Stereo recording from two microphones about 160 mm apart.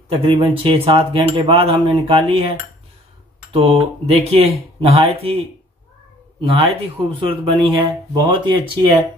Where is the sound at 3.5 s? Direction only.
35° right (ahead or behind).